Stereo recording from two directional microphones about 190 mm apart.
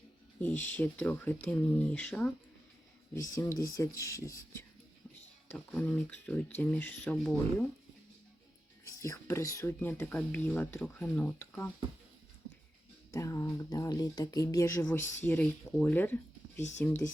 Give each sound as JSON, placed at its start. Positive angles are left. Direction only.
{"t": 0.3, "sound": "speech", "side_deg": 10}
{"t": 3.3, "sound": "speech", "side_deg": 15}
{"t": 8.9, "sound": "speech", "side_deg": 15}
{"t": 13.1, "sound": "speech", "side_deg": 15}